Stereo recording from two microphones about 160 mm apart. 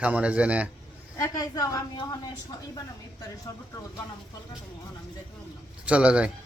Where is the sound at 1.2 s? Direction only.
20° left (ahead or behind).